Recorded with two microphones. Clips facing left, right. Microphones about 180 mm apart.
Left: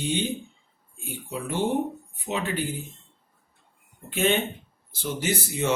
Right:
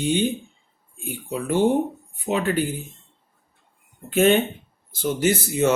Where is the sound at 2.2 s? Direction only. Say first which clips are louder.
Right 6 dB; 50° right (ahead or behind).